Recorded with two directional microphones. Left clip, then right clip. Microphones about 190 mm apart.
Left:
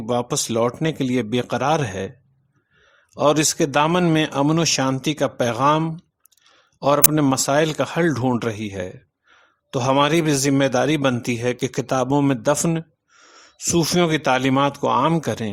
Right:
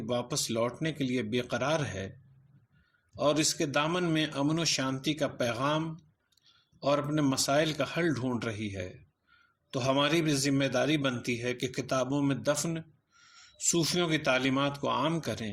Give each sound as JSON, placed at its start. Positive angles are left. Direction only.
{"t": 0.0, "sound": "a man's voice", "side_deg": 40}
{"t": 3.2, "sound": "a man's voice", "side_deg": 40}